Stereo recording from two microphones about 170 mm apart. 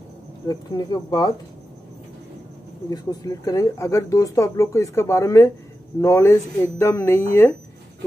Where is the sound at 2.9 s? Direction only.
25° left (ahead or behind).